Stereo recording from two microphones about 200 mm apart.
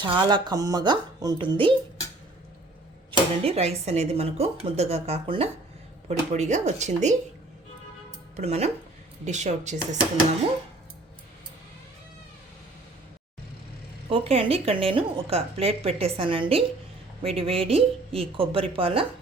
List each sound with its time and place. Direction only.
0.0 s a woman's voice: 25° right (ahead or behind)
3.1 s speech: 30° right (ahead or behind)
8.4 s speech: 30° right (ahead or behind)
14.1 s a woman's voice: 30° right (ahead or behind)